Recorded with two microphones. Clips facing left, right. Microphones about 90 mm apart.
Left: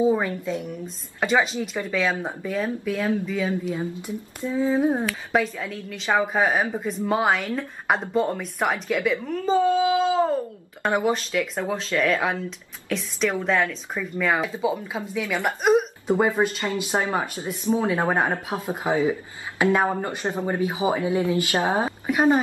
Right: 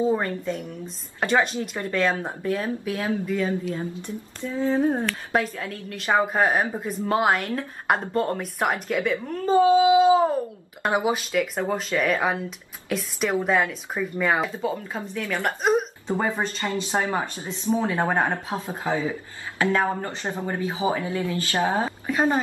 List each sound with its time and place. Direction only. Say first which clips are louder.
0.0 s speech: left 2 dB; 5° left (ahead or behind)
4.4 s a woman's voice: left 1 dB; 15° left (ahead or behind)
5.3 s speech: left 2 dB; centre (ahead or behind)
14.6 s a woman's voice: left 2 dB; 10° left (ahead or behind)